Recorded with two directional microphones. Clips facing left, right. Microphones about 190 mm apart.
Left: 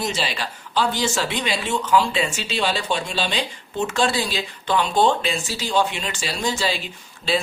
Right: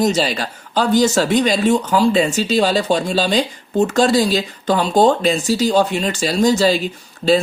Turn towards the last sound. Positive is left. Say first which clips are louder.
# right 11 dB
turn(degrees=-40)  # may be behind; listen again after turning